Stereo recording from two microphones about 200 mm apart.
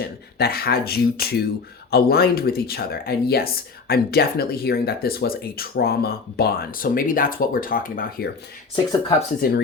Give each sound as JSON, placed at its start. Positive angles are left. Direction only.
{"t": 0.0, "sound": "speech", "side_deg": 50}
{"t": 8.7, "sound": "speech", "side_deg": 25}
{"t": 9.4, "sound": "speech", "side_deg": 50}